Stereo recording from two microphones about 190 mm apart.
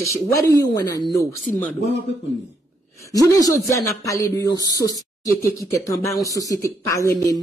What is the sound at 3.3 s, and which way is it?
Speech, 20° left (ahead or behind).